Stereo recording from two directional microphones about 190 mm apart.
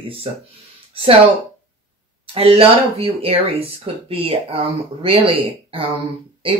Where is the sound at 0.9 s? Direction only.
30° right (ahead or behind).